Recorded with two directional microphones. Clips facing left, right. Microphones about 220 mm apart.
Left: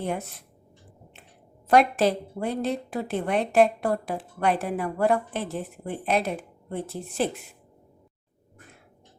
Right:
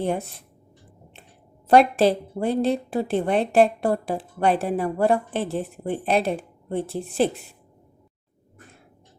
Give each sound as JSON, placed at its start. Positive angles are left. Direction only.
{"t": 0.0, "sound": "a woman's voice", "side_deg": -30}
{"t": 1.6, "sound": "a woman's voice", "side_deg": -30}